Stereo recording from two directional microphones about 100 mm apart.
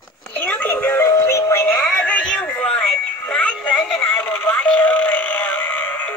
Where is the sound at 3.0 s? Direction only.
10° left (ahead or behind).